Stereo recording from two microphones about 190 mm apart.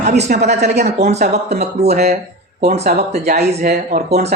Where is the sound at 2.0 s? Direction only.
35° right (ahead or behind).